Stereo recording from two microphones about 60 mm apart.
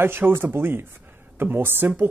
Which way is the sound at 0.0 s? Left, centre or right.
Right.